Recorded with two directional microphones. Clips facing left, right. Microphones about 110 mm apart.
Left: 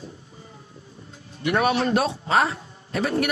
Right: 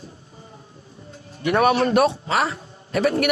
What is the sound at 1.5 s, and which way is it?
A man's voice, 55° right (ahead or behind).